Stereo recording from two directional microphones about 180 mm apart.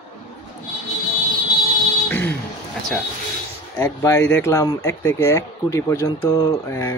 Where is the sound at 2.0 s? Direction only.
10° left (ahead or behind).